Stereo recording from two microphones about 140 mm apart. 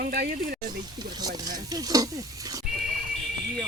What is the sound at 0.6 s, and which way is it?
Speech, 30° right (ahead or behind).